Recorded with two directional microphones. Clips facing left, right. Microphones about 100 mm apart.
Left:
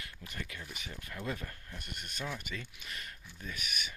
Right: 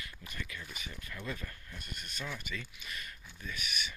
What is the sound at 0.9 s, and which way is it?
Speech, 40° left (ahead or behind).